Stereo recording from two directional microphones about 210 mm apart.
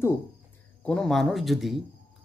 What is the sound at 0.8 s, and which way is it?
Speech, 5° left (ahead or behind).